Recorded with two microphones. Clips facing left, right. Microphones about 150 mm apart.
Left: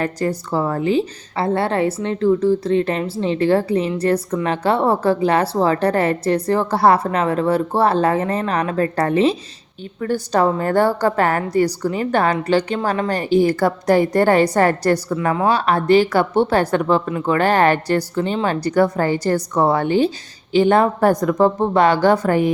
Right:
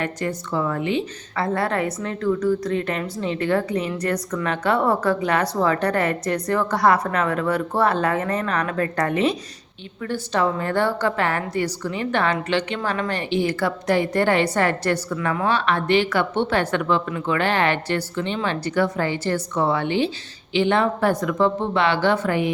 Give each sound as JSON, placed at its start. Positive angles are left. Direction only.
{"t": 0.0, "sound": "a woman's voice", "side_deg": 35}